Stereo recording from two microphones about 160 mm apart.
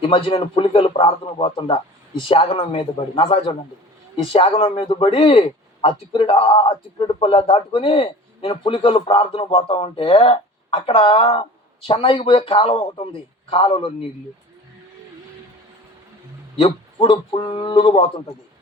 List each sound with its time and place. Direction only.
0.1 s speech: 35° left (ahead or behind)
16.6 s speech: 35° left (ahead or behind)